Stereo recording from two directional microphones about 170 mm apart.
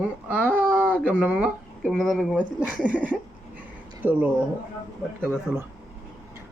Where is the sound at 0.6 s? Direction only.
10° right (ahead or behind).